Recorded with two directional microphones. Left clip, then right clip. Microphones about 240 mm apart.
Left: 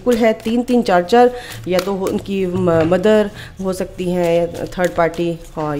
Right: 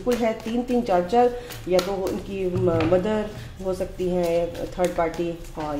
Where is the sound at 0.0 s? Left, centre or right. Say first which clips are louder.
Left 9 dB; left.